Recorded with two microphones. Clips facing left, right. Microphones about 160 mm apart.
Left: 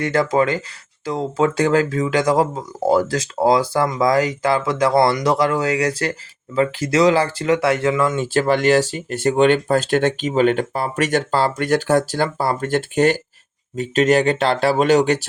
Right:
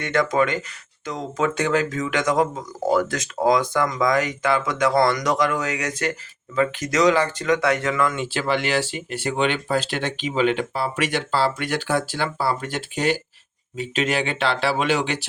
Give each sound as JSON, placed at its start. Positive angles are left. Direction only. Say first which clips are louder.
{"t": 0.0, "sound": "speech", "louder": "left 3 dB", "side_deg": 30}
{"t": 8.1, "sound": "speech", "louder": "left 6 dB", "side_deg": 45}